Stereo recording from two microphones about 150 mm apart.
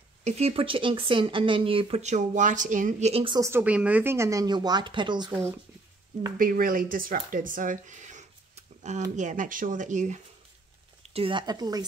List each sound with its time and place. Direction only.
0.2 s speech: 45° right (ahead or behind)
3.3 s speech: 20° right (ahead or behind)
3.6 s speech: 10° right (ahead or behind); by 5.4 s 30° right (ahead or behind)
6.3 s speech: 65° right (ahead or behind)
11.0 s speech: 40° right (ahead or behind)